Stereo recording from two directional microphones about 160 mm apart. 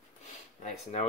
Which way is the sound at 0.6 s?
45° left (ahead or behind).